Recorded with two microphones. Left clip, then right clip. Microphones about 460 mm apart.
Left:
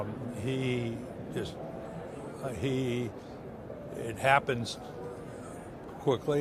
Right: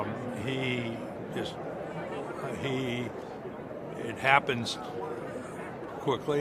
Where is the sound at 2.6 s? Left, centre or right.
Left.